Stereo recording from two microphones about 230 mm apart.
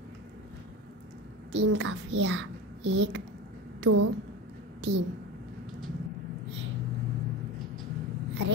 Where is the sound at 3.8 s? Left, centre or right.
Right.